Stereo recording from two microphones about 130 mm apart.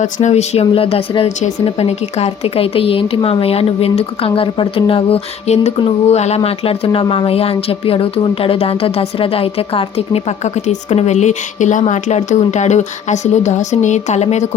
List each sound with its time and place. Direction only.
0.0 s speech: 60° left (ahead or behind)